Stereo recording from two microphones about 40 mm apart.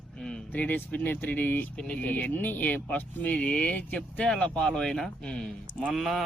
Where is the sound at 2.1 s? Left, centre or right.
Left.